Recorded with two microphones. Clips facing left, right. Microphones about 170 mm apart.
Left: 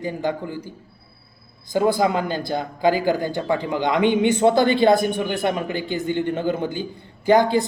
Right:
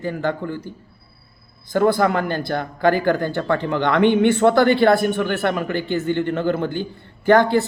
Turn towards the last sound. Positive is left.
turn(degrees=15)  # may be behind; listen again after turning